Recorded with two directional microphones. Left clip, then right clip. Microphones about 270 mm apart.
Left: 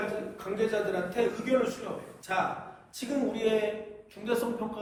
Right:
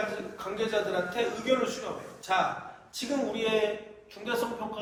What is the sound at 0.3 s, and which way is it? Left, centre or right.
Speech, centre.